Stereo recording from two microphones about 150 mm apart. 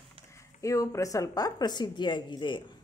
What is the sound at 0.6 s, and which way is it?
A woman's voice, 20° left (ahead or behind).